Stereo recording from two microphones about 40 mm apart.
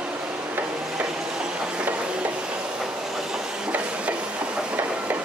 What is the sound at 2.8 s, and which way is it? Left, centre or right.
Train, centre.